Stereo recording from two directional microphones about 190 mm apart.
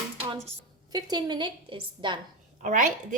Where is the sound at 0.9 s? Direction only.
20° right (ahead or behind).